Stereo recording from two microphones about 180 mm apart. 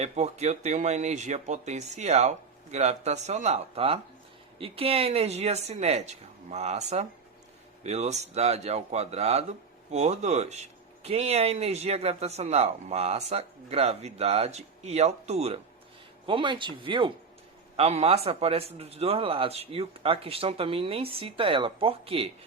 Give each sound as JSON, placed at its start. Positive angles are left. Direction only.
{"t": 0.0, "sound": "speech", "side_deg": -40}